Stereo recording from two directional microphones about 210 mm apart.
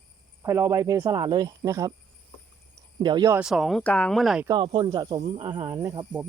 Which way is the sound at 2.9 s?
20° right (ahead or behind).